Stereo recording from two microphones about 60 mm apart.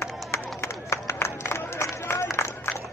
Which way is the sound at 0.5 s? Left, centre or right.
Left.